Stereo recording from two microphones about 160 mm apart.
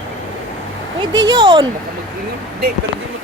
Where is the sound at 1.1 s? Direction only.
25° right (ahead or behind).